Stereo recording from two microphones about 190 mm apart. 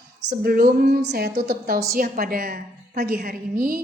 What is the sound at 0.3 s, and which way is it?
A woman's voice, 50° right (ahead or behind).